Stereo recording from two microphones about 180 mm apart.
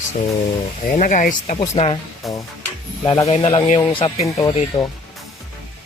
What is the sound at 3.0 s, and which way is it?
Speech, 25° left (ahead or behind).